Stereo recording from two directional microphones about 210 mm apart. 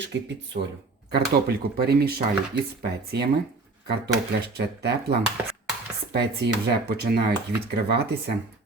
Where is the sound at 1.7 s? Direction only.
50° right (ahead or behind).